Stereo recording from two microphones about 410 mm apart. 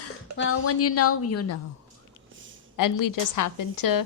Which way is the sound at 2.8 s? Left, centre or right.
Left.